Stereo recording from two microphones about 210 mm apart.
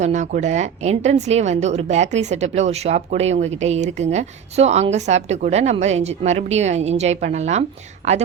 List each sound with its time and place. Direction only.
0.0 s a woman's voice: 35° right (ahead or behind)